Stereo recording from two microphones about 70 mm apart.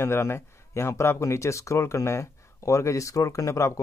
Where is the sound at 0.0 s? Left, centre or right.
Left.